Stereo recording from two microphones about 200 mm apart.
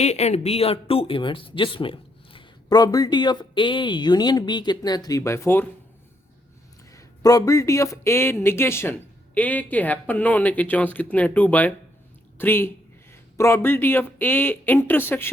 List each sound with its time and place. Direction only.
0.0 s speech: 35° left (ahead or behind); by 5.6 s 10° left (ahead or behind)
6.9 s speech: 15° left (ahead or behind)